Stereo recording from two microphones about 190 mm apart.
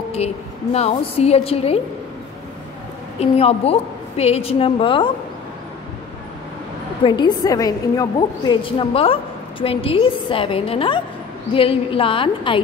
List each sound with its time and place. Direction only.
0.7 s a woman's voice: 30° left (ahead or behind)
3.2 s a woman's voice: 30° left (ahead or behind)
7.1 s a woman's voice: 25° left (ahead or behind)